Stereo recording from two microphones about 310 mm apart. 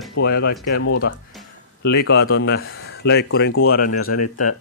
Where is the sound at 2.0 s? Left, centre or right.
Left.